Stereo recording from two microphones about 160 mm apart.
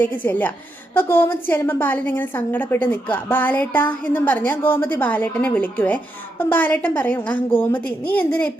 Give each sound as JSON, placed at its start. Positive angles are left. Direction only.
{"t": 0.0, "sound": "a woman's voice", "side_deg": 10}